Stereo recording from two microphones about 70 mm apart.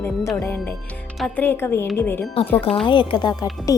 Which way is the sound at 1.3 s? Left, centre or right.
Left.